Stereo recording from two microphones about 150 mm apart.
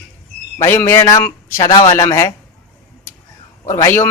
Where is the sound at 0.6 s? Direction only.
15° left (ahead or behind).